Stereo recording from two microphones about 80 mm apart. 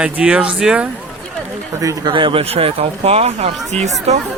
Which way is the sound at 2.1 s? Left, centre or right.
Right.